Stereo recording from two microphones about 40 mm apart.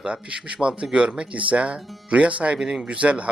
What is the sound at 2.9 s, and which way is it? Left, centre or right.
Speech, right.